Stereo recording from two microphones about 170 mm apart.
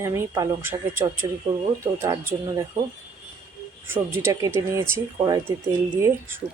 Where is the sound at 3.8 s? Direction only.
15° right (ahead or behind).